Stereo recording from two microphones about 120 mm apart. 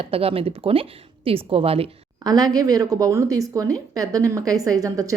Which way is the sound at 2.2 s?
30° right (ahead or behind).